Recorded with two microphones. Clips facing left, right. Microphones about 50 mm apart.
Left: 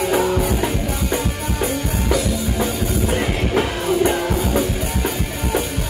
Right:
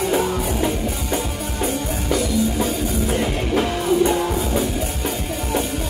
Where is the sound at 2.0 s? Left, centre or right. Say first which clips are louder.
Right 2 dB; left.